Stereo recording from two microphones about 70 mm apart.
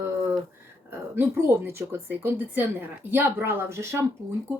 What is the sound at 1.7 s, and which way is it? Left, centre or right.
Speech, right.